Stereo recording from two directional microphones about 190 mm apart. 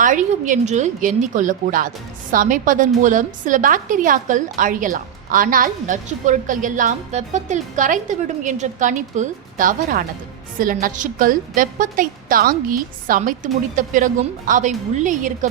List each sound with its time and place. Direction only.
0.0 s a woman's voice: 40° right (ahead or behind)